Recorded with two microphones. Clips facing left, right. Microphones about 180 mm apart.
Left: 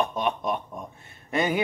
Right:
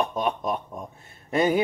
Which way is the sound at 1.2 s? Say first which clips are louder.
Right 3 dB; 35° right (ahead or behind).